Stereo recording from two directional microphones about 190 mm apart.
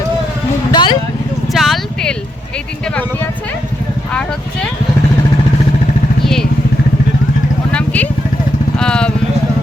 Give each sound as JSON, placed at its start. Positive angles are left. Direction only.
{"t": 0.7, "sound": "vehicle", "side_deg": 25}
{"t": 1.5, "sound": "a sound", "side_deg": 0}
{"t": 6.2, "sound": "vehicle", "side_deg": 5}
{"t": 7.7, "sound": "vehicle", "side_deg": 5}